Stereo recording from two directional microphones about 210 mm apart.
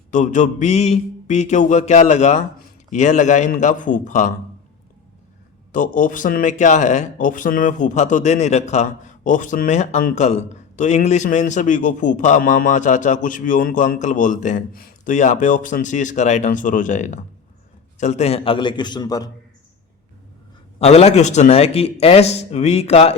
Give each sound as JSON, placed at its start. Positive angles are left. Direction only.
{"t": 0.1, "sound": "speech", "side_deg": 35}
{"t": 5.7, "sound": "a man's voice", "side_deg": 40}
{"t": 20.7, "sound": "a man's voice", "side_deg": 30}